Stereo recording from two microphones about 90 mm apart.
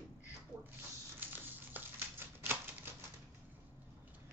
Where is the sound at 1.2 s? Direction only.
20° right (ahead or behind).